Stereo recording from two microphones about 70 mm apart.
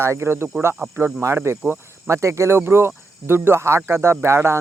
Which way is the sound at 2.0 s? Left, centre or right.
Right.